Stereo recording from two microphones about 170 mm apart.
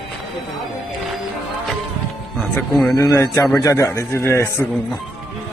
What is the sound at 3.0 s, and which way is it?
A man's voice, 15° left (ahead or behind).